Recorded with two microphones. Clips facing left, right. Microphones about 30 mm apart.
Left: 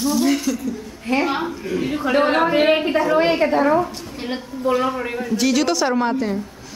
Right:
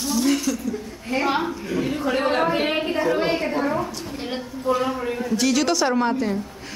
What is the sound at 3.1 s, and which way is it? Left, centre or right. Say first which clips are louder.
Speech: left 5 dB; left.